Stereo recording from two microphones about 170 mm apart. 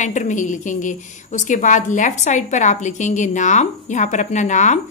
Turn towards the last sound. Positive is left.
turn(degrees=45)  # may be behind; listen again after turning